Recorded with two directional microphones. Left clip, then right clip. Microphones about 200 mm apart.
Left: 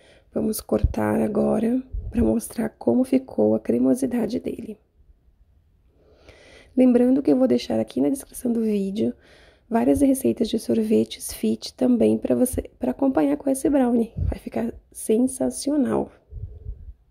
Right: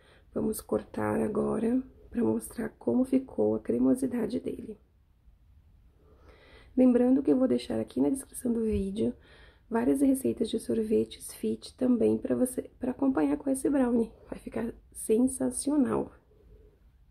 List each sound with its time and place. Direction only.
0.0 s speech: 20° left (ahead or behind)
6.2 s speech: 25° left (ahead or behind)